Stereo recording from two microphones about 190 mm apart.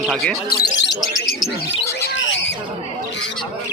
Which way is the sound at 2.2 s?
75° left (ahead or behind).